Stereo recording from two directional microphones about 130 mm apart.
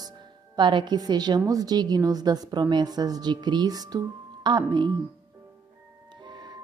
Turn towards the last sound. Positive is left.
turn(degrees=-35)  # may be behind; listen again after turning